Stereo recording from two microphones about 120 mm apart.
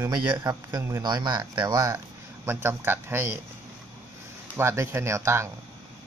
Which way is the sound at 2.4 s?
20° right (ahead or behind).